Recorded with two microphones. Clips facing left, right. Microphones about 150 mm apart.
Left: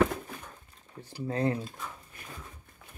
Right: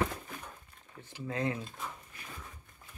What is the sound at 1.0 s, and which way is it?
Speech, 35° left (ahead or behind).